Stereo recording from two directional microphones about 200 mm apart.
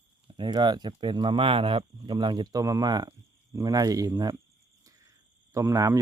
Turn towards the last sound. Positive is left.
turn(degrees=-15)  # may be behind; listen again after turning